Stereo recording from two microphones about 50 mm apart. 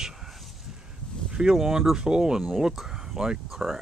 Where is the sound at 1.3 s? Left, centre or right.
Centre.